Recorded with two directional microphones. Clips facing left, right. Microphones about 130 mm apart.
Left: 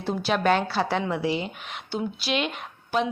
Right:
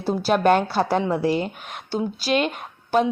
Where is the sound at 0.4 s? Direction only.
50° right (ahead or behind).